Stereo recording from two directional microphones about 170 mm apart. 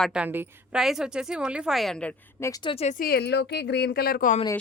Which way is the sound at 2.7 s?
35° left (ahead or behind).